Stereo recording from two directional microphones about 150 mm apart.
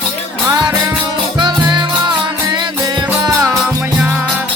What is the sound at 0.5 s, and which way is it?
Music, 25° right (ahead or behind).